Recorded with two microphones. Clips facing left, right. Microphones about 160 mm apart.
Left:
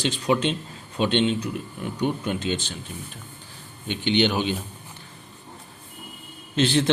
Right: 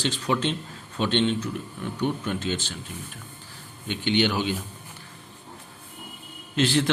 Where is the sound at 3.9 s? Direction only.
20° left (ahead or behind).